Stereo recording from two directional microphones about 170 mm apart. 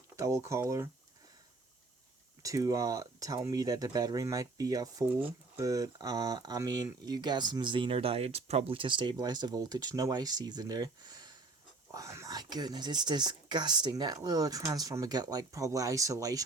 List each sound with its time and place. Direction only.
0.2 s speech: 15° right (ahead or behind)
2.4 s speech: 20° right (ahead or behind)